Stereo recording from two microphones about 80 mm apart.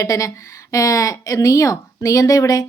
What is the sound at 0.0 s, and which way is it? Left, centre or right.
A woman's voice, left.